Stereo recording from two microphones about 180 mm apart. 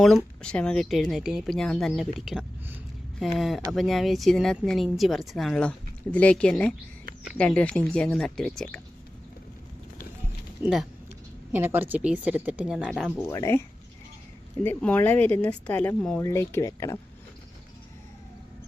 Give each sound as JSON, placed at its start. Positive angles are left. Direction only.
{"t": 0.0, "sound": "speech", "side_deg": 0}
{"t": 10.6, "sound": "speech", "side_deg": 0}
{"t": 13.3, "sound": "speech", "side_deg": 15}
{"t": 14.6, "sound": "speech", "side_deg": 10}